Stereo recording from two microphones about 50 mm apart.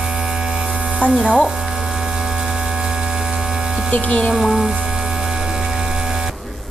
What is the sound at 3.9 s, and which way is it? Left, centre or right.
Speech, left.